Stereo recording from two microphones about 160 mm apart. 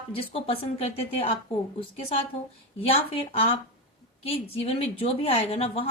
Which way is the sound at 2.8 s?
35° left (ahead or behind).